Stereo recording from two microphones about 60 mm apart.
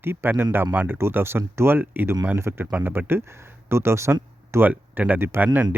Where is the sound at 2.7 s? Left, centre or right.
Right.